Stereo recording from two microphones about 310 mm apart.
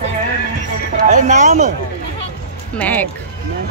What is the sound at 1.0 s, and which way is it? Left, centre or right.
Speech, right.